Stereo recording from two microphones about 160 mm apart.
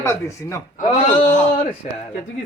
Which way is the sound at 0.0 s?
20° left (ahead or behind).